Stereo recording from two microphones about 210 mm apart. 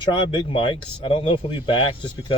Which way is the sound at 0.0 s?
20° left (ahead or behind).